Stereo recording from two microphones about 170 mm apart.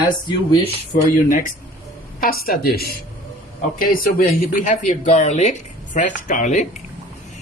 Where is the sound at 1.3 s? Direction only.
50° left (ahead or behind).